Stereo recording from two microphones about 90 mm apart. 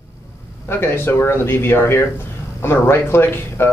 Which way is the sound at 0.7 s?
25° left (ahead or behind).